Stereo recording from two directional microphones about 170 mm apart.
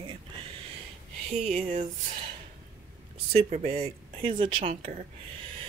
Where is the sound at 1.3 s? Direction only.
40° right (ahead or behind).